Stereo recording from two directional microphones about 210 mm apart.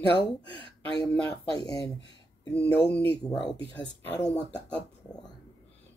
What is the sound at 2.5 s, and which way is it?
Speech, 5° left (ahead or behind).